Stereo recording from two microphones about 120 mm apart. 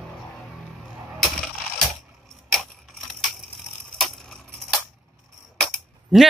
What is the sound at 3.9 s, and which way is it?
Wood, 5° left (ahead or behind).